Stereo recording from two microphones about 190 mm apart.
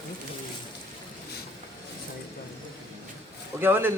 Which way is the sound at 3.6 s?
10° right (ahead or behind).